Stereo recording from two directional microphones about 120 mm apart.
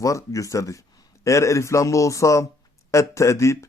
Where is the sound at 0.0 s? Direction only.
25° left (ahead or behind).